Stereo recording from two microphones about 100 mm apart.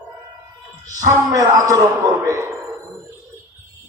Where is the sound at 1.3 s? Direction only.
30° right (ahead or behind).